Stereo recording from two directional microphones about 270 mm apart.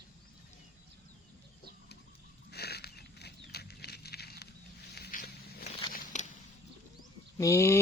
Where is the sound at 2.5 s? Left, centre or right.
Left.